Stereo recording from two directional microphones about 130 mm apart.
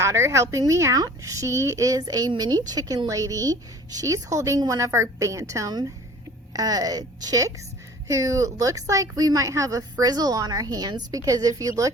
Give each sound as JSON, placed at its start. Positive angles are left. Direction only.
{"t": 0.0, "sound": "a woman's voice", "side_deg": -20}